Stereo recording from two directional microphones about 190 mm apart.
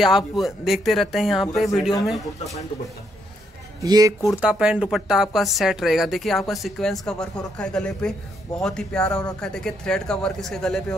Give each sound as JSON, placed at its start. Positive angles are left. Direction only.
{"t": 0.0, "sound": "speech", "side_deg": 0}
{"t": 1.7, "sound": "speech", "side_deg": 20}
{"t": 2.0, "sound": "speech", "side_deg": 0}
{"t": 3.8, "sound": "speech", "side_deg": -20}
{"t": 4.3, "sound": "speech", "side_deg": -5}